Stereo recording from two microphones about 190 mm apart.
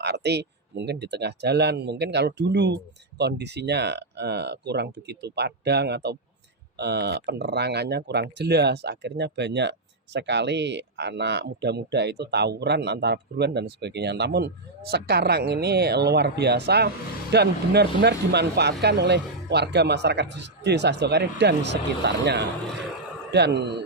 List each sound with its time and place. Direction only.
0.0 s speech: 60° right (ahead or behind)